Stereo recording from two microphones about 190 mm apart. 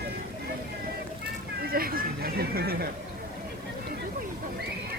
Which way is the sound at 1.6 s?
50° right (ahead or behind).